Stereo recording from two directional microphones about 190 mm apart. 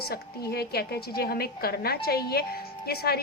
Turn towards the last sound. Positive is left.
turn(degrees=55)  # may be behind; listen again after turning